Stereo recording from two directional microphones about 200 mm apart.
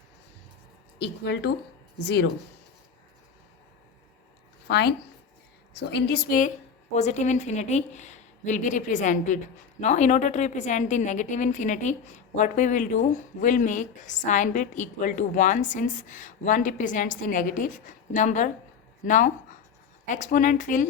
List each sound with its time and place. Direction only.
0.9 s a woman's voice: 55° left (ahead or behind)
5.7 s a woman's voice: 55° left (ahead or behind)